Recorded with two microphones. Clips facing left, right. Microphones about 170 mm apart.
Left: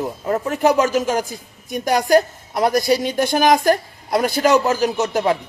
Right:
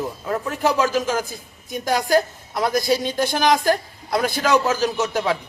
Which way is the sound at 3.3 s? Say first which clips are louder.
Left 4 dB; 45° left (ahead or behind).